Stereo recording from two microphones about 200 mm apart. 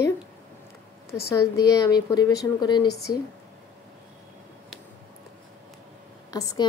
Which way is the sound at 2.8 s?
55° left (ahead or behind).